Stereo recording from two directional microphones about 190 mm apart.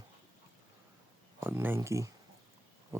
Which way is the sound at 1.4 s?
10° right (ahead or behind).